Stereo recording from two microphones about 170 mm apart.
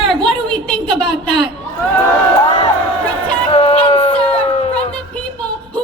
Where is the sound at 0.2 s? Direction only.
5° left (ahead or behind).